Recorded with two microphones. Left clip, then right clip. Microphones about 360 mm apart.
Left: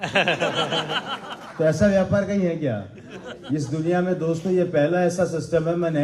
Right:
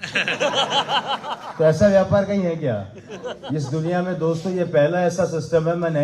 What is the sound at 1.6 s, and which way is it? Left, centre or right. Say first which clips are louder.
A man's voice: right 4 dB; right.